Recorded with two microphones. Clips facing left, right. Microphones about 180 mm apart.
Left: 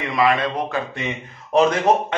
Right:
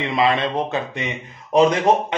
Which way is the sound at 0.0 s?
25° right (ahead or behind).